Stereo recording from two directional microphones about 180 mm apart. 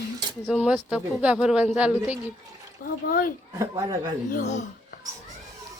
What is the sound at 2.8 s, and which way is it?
Speech, 50° left (ahead or behind).